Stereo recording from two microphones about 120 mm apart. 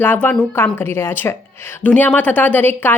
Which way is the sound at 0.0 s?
15° left (ahead or behind).